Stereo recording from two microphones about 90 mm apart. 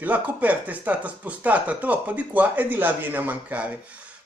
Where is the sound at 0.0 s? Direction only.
20° right (ahead or behind).